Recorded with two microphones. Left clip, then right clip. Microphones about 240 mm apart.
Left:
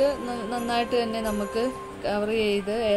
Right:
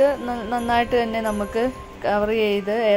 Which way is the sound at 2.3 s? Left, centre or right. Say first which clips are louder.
Right 4 dB; right.